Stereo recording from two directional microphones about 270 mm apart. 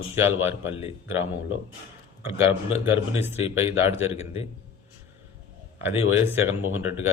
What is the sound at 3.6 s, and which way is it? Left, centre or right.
Speech, centre.